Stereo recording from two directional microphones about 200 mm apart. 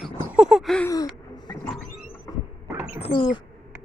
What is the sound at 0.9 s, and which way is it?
Gasp, 20° left (ahead or behind).